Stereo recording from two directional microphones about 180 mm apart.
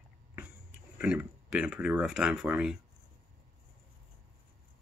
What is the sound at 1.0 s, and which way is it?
Speech, 5° right (ahead or behind).